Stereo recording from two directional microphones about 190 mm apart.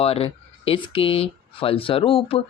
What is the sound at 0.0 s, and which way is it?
Speech, 30° left (ahead or behind).